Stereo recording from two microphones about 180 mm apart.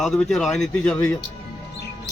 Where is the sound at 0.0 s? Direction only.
Centre (ahead or behind).